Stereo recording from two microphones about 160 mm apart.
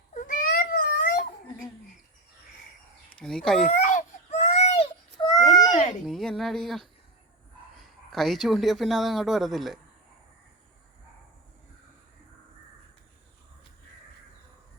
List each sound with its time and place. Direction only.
0.1 s a sound: 60° left (ahead or behind)
3.2 s speech: 5° left (ahead or behind)
3.7 s baby cry: 50° left (ahead or behind); by 5.5 s 25° left (ahead or behind)
5.7 s babbling: 50° left (ahead or behind)
6.1 s speech: centre (ahead or behind)
8.1 s speech: centre (ahead or behind)